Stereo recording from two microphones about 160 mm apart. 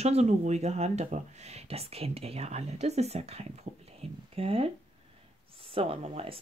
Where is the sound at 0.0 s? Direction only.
40° right (ahead or behind).